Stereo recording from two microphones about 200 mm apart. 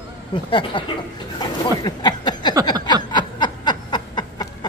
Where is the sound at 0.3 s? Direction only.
25° left (ahead or behind).